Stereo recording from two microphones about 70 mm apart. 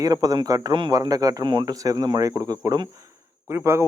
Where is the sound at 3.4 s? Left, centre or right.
Right.